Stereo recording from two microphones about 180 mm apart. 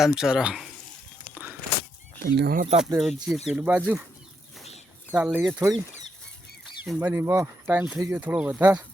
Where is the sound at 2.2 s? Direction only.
60° right (ahead or behind).